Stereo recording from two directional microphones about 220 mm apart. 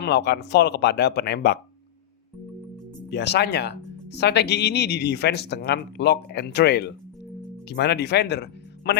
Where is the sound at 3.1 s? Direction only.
50° left (ahead or behind).